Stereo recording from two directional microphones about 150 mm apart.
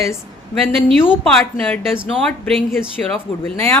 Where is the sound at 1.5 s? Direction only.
5° left (ahead or behind).